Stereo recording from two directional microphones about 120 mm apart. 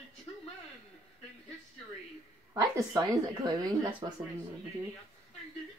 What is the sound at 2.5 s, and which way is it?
Speech, 30° right (ahead or behind).